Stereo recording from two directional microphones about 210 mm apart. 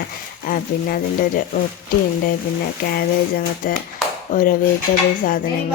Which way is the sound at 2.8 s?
45° left (ahead or behind).